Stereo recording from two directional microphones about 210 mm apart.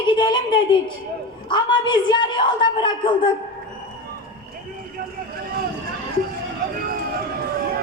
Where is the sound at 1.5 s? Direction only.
20° left (ahead or behind).